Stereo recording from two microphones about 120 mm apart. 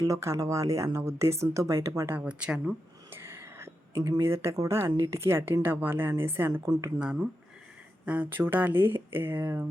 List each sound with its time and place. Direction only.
0.0 s a woman's voice: 25° right (ahead or behind)
4.9 s speech: 35° right (ahead or behind)
5.1 s a woman's voice: 20° right (ahead or behind)